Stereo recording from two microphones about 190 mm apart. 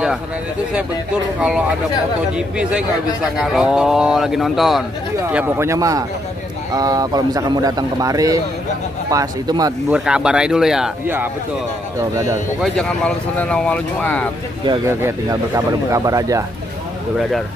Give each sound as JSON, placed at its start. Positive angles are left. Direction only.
{"t": 2.3, "sound": "speech", "side_deg": -5}
{"t": 5.3, "sound": "a man's voice", "side_deg": -10}
{"t": 9.8, "sound": "speech", "side_deg": -5}
{"t": 12.7, "sound": "speech", "side_deg": 5}
{"t": 14.9, "sound": "speech", "side_deg": -15}